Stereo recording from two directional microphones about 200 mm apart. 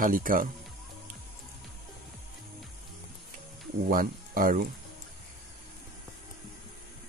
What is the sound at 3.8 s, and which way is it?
Speech, 45° right (ahead or behind).